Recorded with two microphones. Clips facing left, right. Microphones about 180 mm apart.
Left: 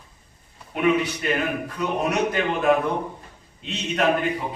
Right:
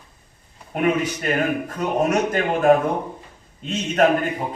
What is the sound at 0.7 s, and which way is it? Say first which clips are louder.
A man's voice: even; 45° right (ahead or behind).